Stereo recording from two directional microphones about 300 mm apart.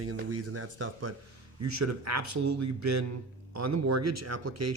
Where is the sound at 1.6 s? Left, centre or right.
Right.